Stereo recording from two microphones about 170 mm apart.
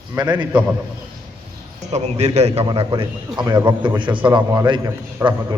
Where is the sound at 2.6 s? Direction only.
30° right (ahead or behind).